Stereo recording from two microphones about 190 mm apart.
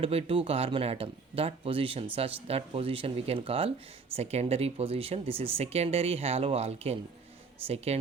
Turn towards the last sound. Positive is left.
turn(degrees=-35)  # may be behind; listen again after turning